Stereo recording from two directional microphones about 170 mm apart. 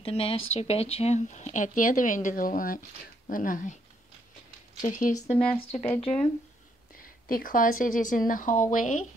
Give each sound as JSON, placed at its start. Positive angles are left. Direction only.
{"t": 0.0, "sound": "speech", "side_deg": 35}
{"t": 4.8, "sound": "speech", "side_deg": 50}
{"t": 5.6, "sound": "speech", "side_deg": 35}
{"t": 7.0, "sound": "speech", "side_deg": 55}